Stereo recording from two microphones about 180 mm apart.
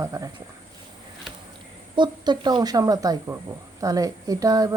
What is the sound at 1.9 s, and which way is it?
Speech, 25° right (ahead or behind).